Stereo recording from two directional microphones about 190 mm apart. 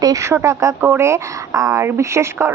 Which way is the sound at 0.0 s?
15° right (ahead or behind).